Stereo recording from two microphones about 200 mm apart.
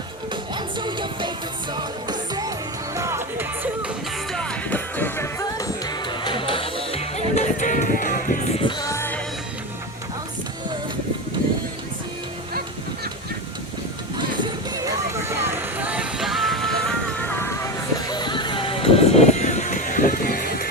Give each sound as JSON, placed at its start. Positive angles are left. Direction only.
{"t": 0.5, "sound": "music", "side_deg": -25}
{"t": 4.3, "sound": "music", "side_deg": 5}
{"t": 6.9, "sound": "music", "side_deg": 35}
{"t": 8.8, "sound": "music", "side_deg": 15}
{"t": 14.8, "sound": "music", "side_deg": -15}